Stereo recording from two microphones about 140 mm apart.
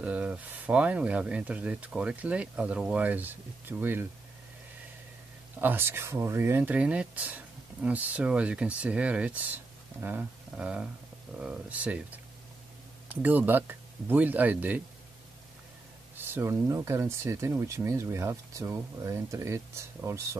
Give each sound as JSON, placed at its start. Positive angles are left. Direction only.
{"t": 0.0, "sound": "speech", "side_deg": -10}
{"t": 5.6, "sound": "speech", "side_deg": -15}
{"t": 16.2, "sound": "speech", "side_deg": -15}